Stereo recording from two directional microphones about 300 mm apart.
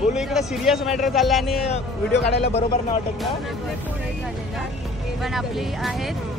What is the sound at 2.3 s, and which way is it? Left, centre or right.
Speech, left.